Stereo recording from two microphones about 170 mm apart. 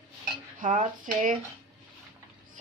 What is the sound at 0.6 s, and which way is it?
Speech, 50° right (ahead or behind).